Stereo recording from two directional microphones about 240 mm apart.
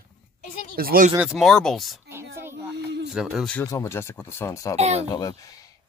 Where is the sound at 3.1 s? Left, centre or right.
Centre.